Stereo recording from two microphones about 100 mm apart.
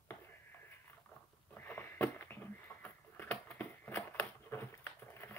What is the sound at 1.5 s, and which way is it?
Sniff, 20° left (ahead or behind).